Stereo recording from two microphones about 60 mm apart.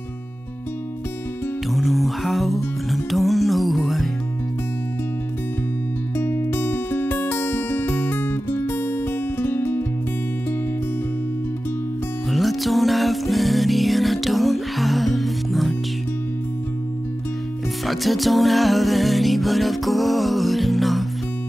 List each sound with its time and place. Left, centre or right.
1.7 s music: centre
6.1 s music: left
12.3 s music: centre
17.8 s music: centre